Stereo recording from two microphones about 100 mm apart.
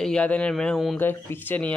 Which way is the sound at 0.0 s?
10° left (ahead or behind).